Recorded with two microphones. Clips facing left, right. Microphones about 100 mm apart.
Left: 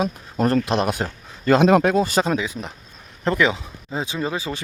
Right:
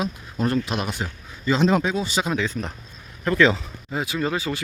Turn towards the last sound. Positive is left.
turn(degrees=25)  # may be behind; listen again after turning